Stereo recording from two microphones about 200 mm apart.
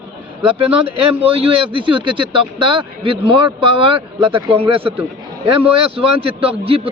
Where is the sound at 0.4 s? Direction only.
25° right (ahead or behind).